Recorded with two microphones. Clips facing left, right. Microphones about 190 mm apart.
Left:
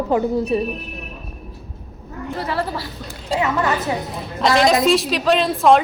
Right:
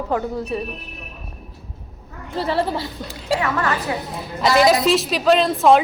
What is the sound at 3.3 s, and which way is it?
Speech, 20° left (ahead or behind).